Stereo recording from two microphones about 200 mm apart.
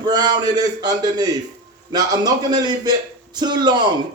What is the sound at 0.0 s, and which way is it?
A man's voice, 20° right (ahead or behind).